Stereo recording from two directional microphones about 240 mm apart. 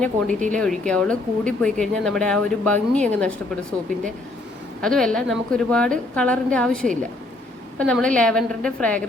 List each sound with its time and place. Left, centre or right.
0.3 s speech: right
0.5 s speech: centre